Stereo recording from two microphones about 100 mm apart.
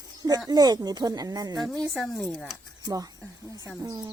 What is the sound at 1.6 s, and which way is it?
Speech, centre (ahead or behind).